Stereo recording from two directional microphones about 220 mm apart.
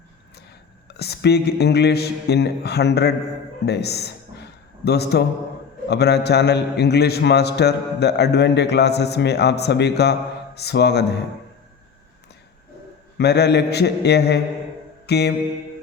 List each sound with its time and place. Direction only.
0.9 s a man's voice: 45° left (ahead or behind)
13.1 s a man's voice: 50° left (ahead or behind)
15.0 s mantra: 50° left (ahead or behind)